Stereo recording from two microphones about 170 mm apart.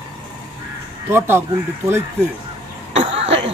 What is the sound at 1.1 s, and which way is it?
Speech, 15° right (ahead or behind).